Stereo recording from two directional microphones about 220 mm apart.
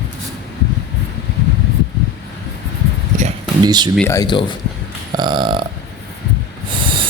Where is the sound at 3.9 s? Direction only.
10° left (ahead or behind).